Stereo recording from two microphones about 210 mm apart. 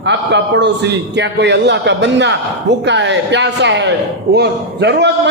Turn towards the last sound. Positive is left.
turn(degrees=-55)  # may be behind; listen again after turning